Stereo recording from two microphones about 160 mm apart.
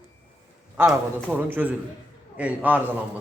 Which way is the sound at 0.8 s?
10° right (ahead or behind).